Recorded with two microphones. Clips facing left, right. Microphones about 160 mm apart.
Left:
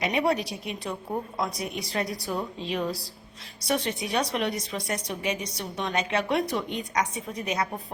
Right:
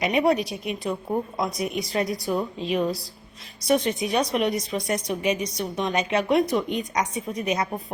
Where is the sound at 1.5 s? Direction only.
15° right (ahead or behind).